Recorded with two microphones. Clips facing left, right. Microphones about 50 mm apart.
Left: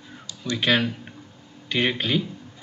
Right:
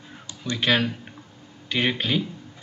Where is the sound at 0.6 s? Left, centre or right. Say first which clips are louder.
Even; centre.